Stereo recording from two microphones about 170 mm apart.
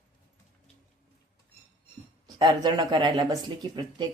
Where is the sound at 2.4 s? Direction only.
25° right (ahead or behind).